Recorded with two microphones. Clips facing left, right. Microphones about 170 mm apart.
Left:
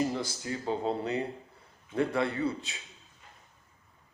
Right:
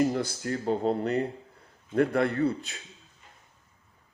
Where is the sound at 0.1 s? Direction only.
55° right (ahead or behind).